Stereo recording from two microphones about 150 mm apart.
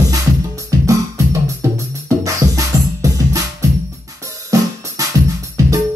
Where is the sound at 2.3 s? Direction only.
20° right (ahead or behind).